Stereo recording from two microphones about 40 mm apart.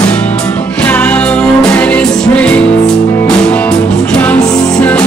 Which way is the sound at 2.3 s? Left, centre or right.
Left.